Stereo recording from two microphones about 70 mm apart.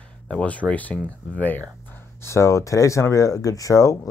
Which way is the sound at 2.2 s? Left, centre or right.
Left.